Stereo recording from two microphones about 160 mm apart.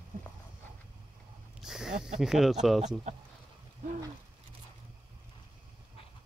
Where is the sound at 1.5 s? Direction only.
5° right (ahead or behind).